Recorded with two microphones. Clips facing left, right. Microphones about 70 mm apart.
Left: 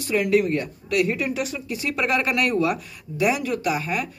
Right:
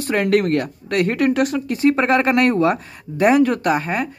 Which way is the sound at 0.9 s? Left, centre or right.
Right.